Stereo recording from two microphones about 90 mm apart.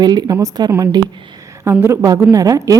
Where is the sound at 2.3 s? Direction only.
40° right (ahead or behind).